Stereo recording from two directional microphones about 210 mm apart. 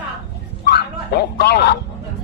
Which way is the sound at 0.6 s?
50° left (ahead or behind).